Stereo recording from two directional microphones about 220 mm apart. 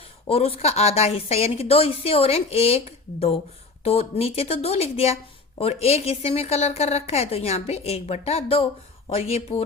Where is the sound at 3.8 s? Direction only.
25° left (ahead or behind).